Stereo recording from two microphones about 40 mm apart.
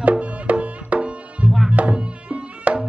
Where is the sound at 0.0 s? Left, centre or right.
Right.